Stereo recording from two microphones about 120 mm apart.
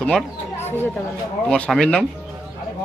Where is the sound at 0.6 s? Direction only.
15° left (ahead or behind).